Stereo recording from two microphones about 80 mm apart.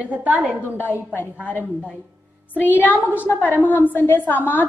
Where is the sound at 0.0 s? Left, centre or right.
Centre.